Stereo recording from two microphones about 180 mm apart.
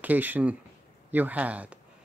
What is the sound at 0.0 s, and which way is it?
Speech, 10° right (ahead or behind).